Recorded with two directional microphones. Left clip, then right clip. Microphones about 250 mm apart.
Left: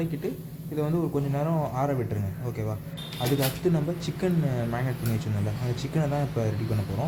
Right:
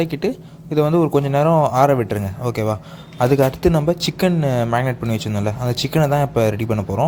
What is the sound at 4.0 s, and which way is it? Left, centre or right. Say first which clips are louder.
A man's voice: right 10 dB; right.